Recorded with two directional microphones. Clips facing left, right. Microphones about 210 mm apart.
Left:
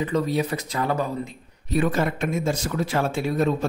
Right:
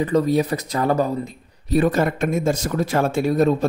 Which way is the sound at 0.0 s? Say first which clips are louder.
Right 5 dB; 40° right (ahead or behind).